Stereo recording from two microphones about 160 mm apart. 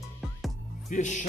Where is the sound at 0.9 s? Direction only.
50° left (ahead or behind).